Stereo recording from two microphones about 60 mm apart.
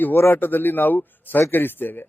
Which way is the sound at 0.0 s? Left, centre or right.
Left.